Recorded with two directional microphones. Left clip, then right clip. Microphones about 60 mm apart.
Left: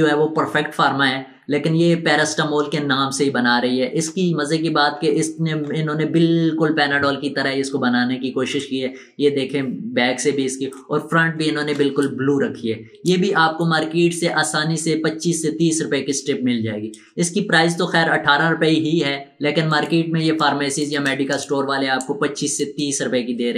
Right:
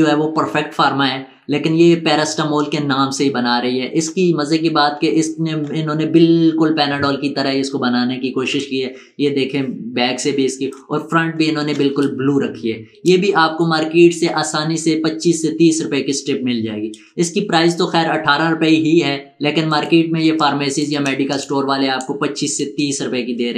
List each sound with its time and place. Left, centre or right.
0.0 s speech: right